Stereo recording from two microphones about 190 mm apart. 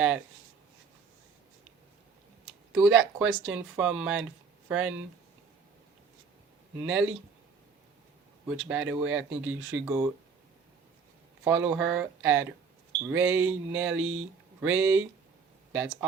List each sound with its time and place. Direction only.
2.7 s speech: 5° right (ahead or behind)
6.8 s speech: 10° right (ahead or behind)
8.4 s speech: 5° right (ahead or behind)
9.4 s speech: 90° right
9.8 s speech: 15° right (ahead or behind)
11.4 s speech: 10° right (ahead or behind)
13.9 s speech: 90° right
14.6 s speech: 10° right (ahead or behind)